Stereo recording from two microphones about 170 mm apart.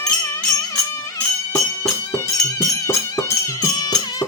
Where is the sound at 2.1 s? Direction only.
20° left (ahead or behind).